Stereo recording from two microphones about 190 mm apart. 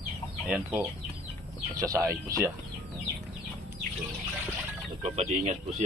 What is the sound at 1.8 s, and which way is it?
Speech, 15° right (ahead or behind).